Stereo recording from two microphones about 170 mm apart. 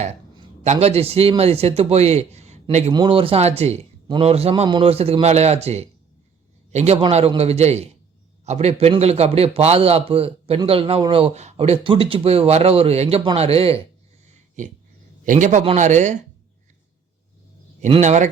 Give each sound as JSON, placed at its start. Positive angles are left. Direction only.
{"t": 0.6, "sound": "a man's voice", "side_deg": -40}
{"t": 2.9, "sound": "a man's voice", "side_deg": -30}
{"t": 14.3, "sound": "a sound", "side_deg": -45}
{"t": 15.2, "sound": "speech", "side_deg": -50}
{"t": 17.8, "sound": "speech", "side_deg": -40}